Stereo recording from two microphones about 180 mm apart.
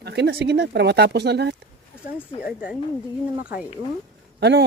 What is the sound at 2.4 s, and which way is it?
Speech, 5° right (ahead or behind).